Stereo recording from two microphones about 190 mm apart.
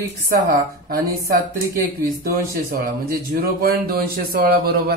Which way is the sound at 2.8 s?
50° right (ahead or behind).